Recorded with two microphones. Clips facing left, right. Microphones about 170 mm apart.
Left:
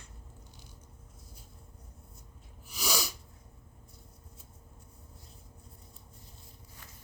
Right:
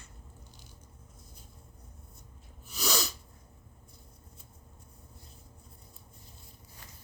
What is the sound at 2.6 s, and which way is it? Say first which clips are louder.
Sneeze: right 2 dB; 10° left (ahead or behind).